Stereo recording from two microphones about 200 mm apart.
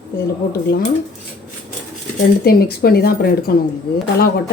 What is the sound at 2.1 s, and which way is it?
Speech, 50° left (ahead or behind).